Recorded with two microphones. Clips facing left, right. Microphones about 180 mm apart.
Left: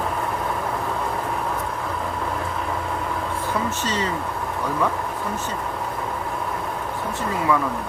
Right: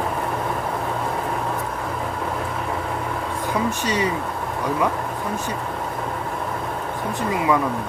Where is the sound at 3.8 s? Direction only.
10° right (ahead or behind).